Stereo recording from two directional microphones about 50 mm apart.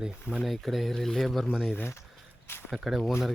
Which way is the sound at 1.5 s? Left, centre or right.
Centre.